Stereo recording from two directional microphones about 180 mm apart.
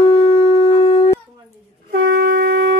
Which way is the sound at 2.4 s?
85° right.